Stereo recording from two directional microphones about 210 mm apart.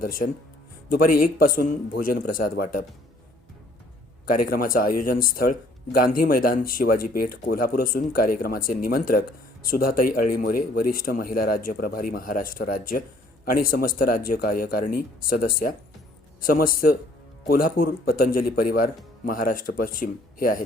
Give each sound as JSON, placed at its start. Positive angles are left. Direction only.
{"t": 0.0, "sound": "speech", "side_deg": 45}
{"t": 4.3, "sound": "speech", "side_deg": 45}